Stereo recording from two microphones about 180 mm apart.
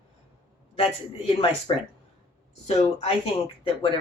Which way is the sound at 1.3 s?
30° left (ahead or behind).